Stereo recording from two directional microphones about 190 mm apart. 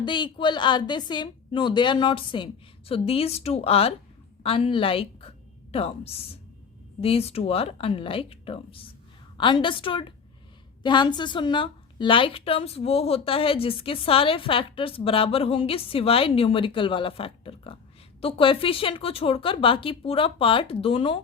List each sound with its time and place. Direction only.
0.0 s a woman's voice: 25° left (ahead or behind)